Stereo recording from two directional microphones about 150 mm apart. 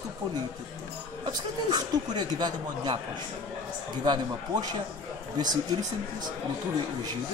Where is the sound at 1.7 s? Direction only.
30° right (ahead or behind).